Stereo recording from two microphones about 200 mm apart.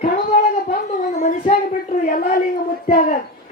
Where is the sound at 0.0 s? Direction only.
45° left (ahead or behind).